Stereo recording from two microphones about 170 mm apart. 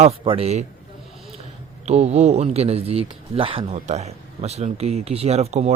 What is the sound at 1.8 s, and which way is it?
Speech, 40° right (ahead or behind).